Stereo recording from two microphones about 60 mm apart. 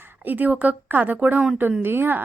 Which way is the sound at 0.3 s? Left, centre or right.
Right.